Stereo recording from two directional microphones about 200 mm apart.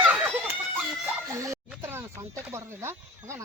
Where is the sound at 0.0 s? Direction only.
10° right (ahead or behind).